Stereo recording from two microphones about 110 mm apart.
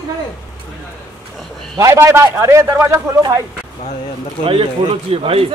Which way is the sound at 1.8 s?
25° right (ahead or behind).